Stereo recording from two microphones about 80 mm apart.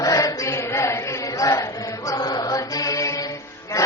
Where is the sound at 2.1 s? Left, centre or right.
Left.